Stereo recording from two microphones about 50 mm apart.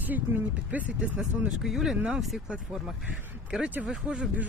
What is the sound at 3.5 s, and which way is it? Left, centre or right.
Speech, centre.